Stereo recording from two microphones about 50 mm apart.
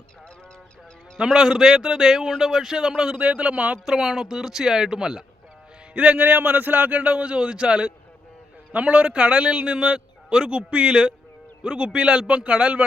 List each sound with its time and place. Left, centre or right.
1.3 s a man's voice: centre
3.2 s a man's voice: right
3.8 s speech: centre
5.9 s speech: right
6.1 s a man's voice: right